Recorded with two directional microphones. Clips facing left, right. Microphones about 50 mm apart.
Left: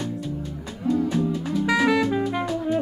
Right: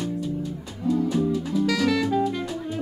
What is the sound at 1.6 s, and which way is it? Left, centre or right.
Music, left.